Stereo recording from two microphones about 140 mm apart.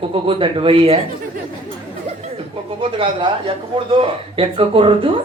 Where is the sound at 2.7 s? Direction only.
35° right (ahead or behind).